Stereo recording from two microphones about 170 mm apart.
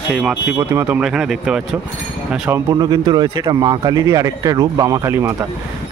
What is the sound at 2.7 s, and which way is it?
Speech, 25° right (ahead or behind).